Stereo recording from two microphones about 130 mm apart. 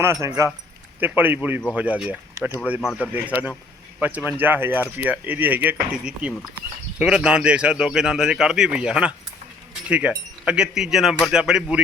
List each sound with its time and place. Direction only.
0.0 s speech: 20° right (ahead or behind); by 11.8 s 5° right (ahead or behind)